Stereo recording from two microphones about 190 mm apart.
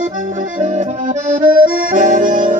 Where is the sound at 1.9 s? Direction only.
45° right (ahead or behind).